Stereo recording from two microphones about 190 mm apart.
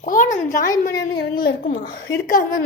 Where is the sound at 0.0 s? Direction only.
45° left (ahead or behind).